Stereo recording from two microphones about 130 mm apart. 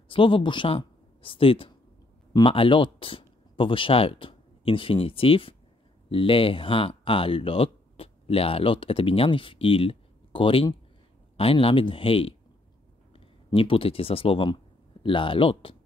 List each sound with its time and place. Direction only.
0.1 s speech: 40° left (ahead or behind)